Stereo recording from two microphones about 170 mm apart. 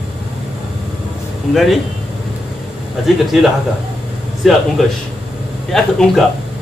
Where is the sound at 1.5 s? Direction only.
Centre (ahead or behind).